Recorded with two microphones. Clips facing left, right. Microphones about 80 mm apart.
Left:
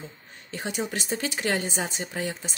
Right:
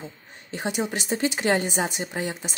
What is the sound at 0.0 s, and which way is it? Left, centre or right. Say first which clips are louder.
Speech: right 2 dB; right.